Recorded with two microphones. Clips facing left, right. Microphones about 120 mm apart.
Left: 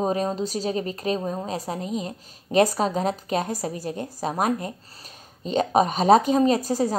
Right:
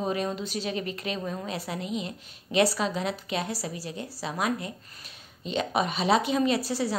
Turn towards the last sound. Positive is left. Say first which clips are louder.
# left 5 dB
turn(degrees=45)  # may be behind; listen again after turning